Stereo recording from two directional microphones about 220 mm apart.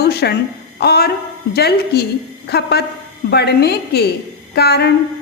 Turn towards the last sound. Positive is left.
turn(degrees=45)  # may be behind; listen again after turning